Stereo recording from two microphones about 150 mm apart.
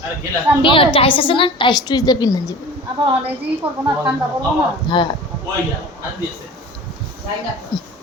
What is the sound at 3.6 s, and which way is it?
Speech, 40° right (ahead or behind).